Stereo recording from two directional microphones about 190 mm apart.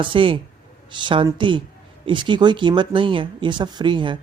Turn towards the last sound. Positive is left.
turn(degrees=-25)  # may be behind; listen again after turning